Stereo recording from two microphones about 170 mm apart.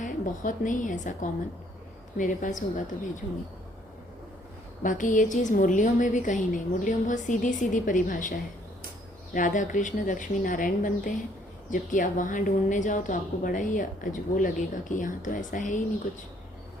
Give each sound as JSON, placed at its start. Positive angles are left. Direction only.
{"t": 0.0, "sound": "a woman's voice", "side_deg": 50}
{"t": 4.8, "sound": "a woman's voice", "side_deg": 50}